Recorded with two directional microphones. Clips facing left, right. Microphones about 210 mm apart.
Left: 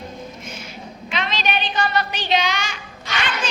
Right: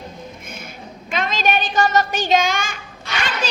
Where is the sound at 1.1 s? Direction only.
50° right (ahead or behind).